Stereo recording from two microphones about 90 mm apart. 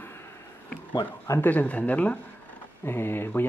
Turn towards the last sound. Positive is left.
turn(degrees=25)  # may be behind; listen again after turning